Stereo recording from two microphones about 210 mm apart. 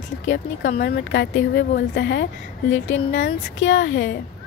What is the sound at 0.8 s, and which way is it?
A woman's voice, 50° left (ahead or behind).